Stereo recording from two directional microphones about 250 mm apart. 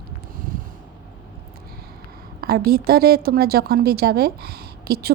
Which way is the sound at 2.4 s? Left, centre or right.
Right.